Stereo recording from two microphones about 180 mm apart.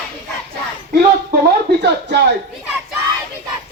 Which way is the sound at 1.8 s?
70° right (ahead or behind).